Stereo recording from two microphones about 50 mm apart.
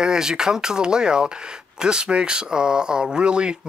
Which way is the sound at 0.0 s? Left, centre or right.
Centre.